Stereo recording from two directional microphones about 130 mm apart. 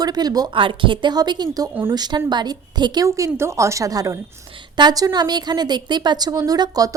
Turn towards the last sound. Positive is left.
turn(degrees=-30)  # may be behind; listen again after turning